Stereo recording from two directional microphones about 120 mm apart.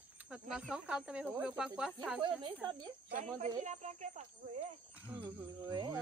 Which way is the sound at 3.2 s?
90° right.